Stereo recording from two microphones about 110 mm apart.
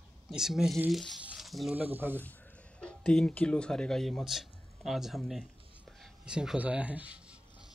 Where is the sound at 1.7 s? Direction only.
15° right (ahead or behind).